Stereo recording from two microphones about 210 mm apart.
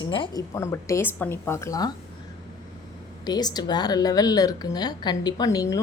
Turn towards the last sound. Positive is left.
turn(degrees=15)  # may be behind; listen again after turning